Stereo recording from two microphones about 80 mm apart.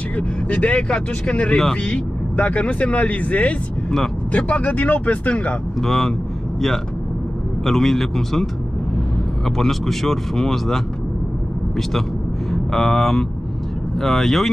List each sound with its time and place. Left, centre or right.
0.5 s speech: centre
5.8 s speech: centre
7.6 s speech: centre
9.6 s speech: centre
12.4 s speech: centre